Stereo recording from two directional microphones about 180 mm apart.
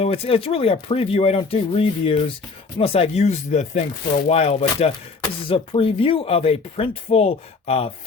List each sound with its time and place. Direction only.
0.0 s speech: 35° left (ahead or behind)